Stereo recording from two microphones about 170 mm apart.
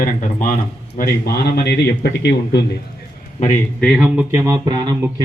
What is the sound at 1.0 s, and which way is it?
A man's voice, 65° left (ahead or behind).